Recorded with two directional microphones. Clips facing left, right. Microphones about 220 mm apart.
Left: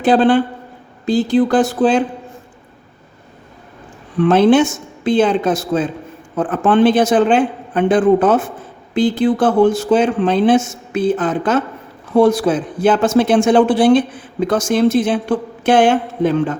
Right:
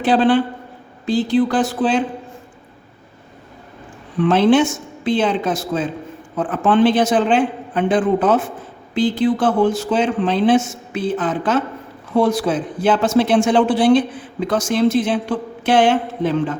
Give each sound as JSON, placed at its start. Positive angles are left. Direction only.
{"t": 0.0, "sound": "speech", "side_deg": 45}
{"t": 4.3, "sound": "speech", "side_deg": 45}